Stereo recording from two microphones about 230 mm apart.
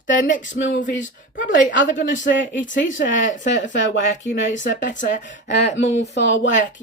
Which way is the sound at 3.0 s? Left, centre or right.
Left.